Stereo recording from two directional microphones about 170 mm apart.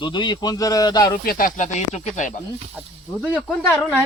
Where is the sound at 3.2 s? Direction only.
10° left (ahead or behind).